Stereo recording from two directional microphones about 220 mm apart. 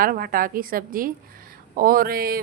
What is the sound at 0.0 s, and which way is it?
A woman's voice, 40° right (ahead or behind).